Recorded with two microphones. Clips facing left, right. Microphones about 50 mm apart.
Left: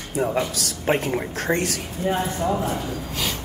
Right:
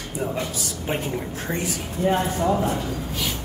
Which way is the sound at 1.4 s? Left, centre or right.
Left.